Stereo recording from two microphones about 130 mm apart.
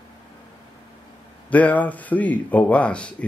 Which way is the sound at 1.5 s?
10° left (ahead or behind).